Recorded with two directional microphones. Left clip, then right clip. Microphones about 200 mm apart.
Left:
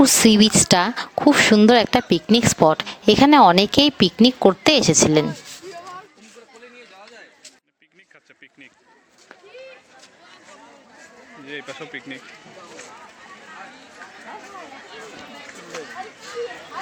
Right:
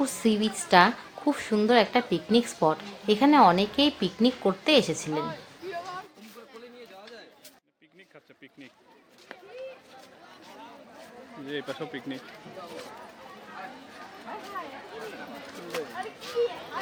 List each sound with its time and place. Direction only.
0.0 s speech: 50° left (ahead or behind)
11.4 s speech: 25° right (ahead or behind)